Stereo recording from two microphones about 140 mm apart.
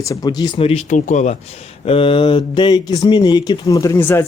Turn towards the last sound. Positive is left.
turn(degrees=15)  # may be behind; listen again after turning